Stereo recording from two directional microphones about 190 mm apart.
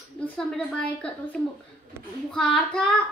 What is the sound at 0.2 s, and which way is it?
Speech, 5° left (ahead or behind).